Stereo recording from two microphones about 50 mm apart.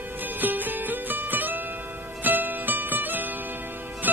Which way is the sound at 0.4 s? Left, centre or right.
Right.